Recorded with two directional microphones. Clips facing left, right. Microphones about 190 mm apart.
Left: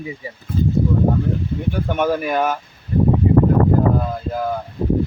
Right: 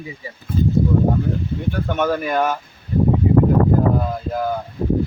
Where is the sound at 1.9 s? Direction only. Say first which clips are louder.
Left 1 dB; 10° left (ahead or behind).